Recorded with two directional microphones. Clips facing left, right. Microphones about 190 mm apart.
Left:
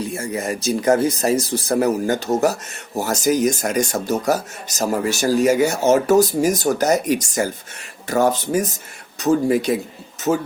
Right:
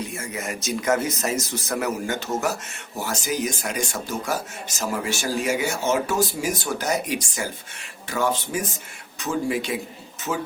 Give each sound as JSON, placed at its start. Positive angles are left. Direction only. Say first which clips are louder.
{"t": 0.1, "sound": "speech", "louder": "left 7 dB", "side_deg": 35}